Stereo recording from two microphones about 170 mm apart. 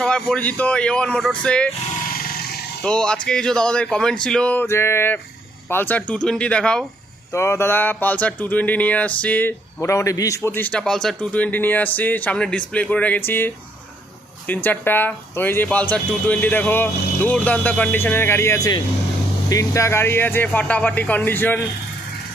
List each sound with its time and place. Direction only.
0.0 s speech: 5° left (ahead or behind)
2.1 s wild animals: 65° left (ahead or behind)
2.8 s speech: 5° left (ahead or behind)
7.3 s speech: 15° left (ahead or behind)